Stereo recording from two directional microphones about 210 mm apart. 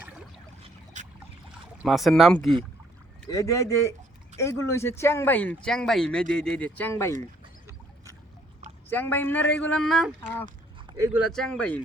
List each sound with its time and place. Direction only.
0.9 s a sound: 35° right (ahead or behind)
1.8 s speech: centre (ahead or behind)
3.2 s speech: 15° left (ahead or behind)
8.9 s speech: 10° left (ahead or behind)
10.8 s a sound: 20° right (ahead or behind)
11.2 s speech: centre (ahead or behind)